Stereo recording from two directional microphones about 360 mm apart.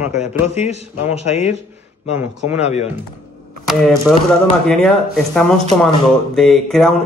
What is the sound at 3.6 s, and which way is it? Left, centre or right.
Speech, centre.